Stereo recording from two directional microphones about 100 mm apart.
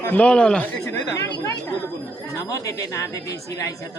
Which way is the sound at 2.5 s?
35° left (ahead or behind).